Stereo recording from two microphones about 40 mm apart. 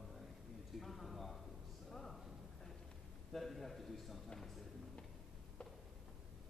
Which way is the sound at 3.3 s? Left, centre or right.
Centre.